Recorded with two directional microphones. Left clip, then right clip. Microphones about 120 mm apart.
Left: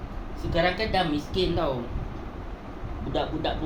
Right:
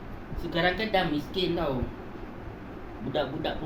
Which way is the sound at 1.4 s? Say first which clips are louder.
Left 3 dB; 40° left (ahead or behind).